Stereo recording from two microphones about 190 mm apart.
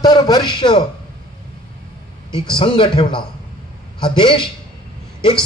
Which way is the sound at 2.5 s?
25° left (ahead or behind).